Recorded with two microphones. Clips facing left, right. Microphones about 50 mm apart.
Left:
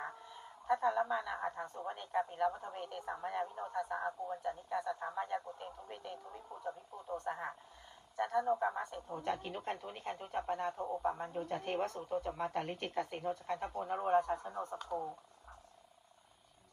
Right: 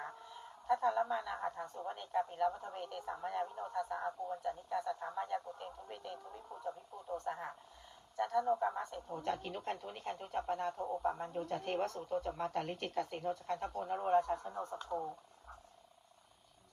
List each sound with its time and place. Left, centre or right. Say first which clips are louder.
0.7 s a woman's voice: even; centre
7.3 s speech: left 1 dB; centre
10.8 s speech: even; centre
11.0 s speech: left 1 dB; centre
14.2 s speech: even; left